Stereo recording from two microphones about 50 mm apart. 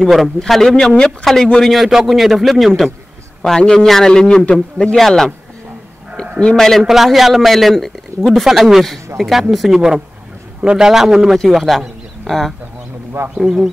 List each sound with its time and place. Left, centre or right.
0.0 s a man's voice: centre
4.9 s a man's voice: centre
6.5 s a man's voice: centre
6.8 s a man's voice: centre
8.5 s a man's voice: centre
9.8 s a man's voice: centre
13.4 s a man's voice: centre